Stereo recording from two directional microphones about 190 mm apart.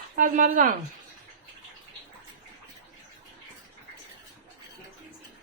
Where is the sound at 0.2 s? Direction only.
45° right (ahead or behind).